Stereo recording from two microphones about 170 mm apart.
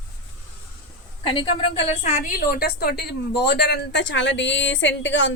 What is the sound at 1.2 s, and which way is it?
A woman's voice, 30° left (ahead or behind).